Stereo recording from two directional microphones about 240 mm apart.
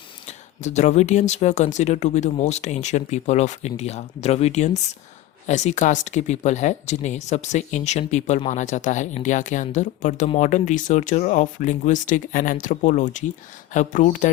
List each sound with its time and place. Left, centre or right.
0.3 s speech: left